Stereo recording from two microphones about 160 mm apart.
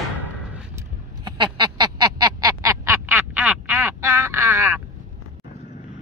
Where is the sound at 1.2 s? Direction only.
25° right (ahead or behind).